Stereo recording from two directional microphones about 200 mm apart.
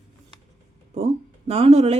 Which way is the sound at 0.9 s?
30° right (ahead or behind).